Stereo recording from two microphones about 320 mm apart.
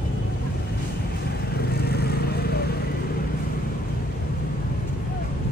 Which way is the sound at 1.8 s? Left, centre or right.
Left.